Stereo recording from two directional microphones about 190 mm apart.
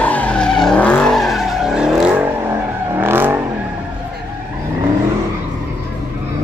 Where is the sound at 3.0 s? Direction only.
10° right (ahead or behind).